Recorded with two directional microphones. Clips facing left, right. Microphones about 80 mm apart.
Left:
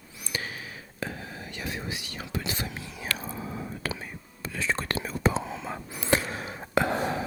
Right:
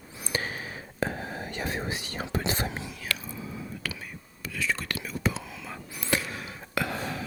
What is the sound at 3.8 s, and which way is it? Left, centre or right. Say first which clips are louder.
Whispering: left 3 dB; left.